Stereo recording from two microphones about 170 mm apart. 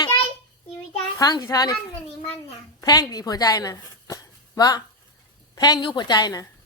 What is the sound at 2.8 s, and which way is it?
A woman's voice, 25° left (ahead or behind).